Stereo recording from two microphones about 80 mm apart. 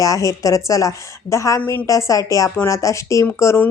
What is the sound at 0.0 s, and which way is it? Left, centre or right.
Speech, left.